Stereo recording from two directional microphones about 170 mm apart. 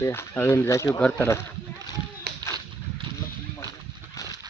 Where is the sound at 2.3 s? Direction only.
70° right (ahead or behind).